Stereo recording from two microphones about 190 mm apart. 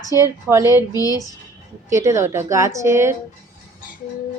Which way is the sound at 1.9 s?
15° right (ahead or behind).